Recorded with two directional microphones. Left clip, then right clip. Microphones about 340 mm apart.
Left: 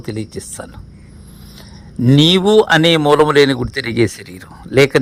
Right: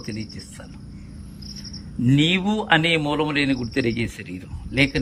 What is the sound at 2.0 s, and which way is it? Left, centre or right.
Speech, centre.